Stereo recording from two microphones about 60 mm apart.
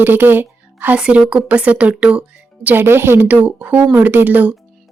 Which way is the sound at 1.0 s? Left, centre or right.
Centre.